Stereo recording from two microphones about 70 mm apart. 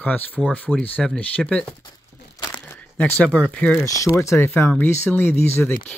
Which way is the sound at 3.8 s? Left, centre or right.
Left.